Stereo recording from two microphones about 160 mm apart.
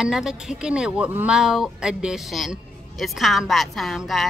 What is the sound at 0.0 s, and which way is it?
Speech, 5° right (ahead or behind).